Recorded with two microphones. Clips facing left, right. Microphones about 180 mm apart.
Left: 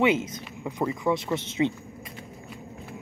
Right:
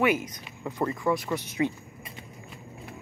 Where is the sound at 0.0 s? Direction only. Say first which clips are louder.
Left 2 dB; 25° left (ahead or behind).